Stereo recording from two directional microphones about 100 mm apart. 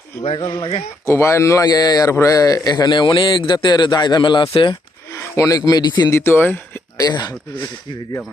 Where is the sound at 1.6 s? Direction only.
40° left (ahead or behind).